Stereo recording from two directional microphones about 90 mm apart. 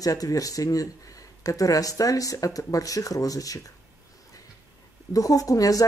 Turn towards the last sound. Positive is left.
turn(degrees=40)  # may be behind; listen again after turning